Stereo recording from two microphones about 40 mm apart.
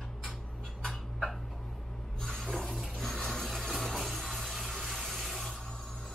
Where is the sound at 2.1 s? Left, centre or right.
Centre.